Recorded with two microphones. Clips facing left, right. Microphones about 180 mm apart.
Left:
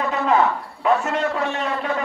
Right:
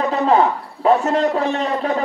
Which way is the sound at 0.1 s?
35° right (ahead or behind).